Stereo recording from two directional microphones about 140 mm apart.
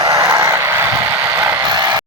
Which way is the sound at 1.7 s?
30° right (ahead or behind).